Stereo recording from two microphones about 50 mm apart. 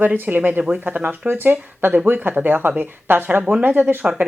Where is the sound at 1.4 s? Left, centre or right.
Right.